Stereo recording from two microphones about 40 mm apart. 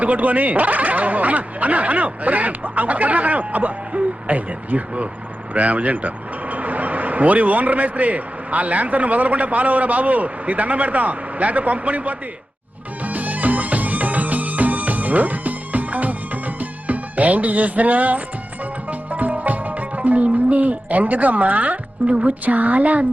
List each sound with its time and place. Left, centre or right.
0.0 s a man's voice: right
13.1 s music: right
22.1 s speech: right
22.4 s speech: right